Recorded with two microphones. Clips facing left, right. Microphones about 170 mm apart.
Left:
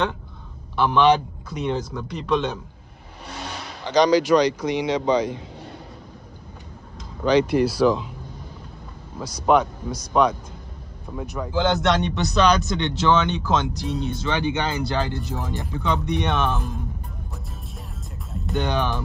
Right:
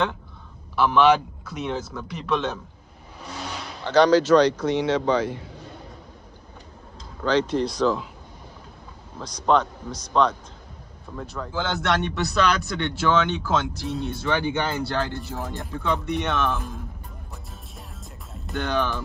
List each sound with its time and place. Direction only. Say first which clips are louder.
0.7 s speech: even; 5° right (ahead or behind)
3.5 s speech: right 1 dB; 15° left (ahead or behind)
7.2 s speech: left 4 dB; 10° left (ahead or behind)
9.2 s speech: left 2 dB; 10° left (ahead or behind)
18.5 s speech: left 1 dB; 15° left (ahead or behind)